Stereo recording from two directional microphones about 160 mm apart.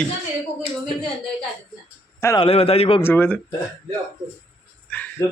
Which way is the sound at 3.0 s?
10° left (ahead or behind).